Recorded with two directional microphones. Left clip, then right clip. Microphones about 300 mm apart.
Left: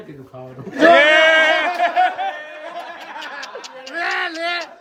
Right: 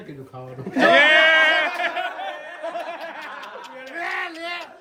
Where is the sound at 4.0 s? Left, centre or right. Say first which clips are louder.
Left 6 dB; left.